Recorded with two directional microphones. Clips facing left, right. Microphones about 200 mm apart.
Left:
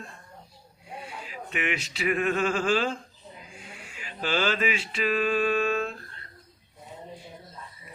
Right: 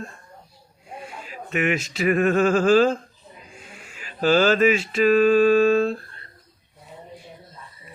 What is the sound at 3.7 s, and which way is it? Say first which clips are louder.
Mantra: even; 40° right (ahead or behind).